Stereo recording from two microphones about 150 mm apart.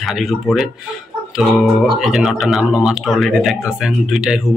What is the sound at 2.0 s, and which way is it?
Speech, centre (ahead or behind).